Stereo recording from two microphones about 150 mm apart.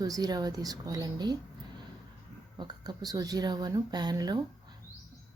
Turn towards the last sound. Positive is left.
turn(degrees=-25)  # may be behind; listen again after turning